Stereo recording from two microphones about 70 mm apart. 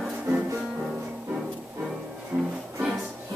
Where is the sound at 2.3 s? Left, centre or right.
Right.